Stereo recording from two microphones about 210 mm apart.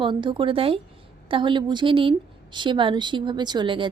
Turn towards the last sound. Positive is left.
turn(degrees=-25)  # may be behind; listen again after turning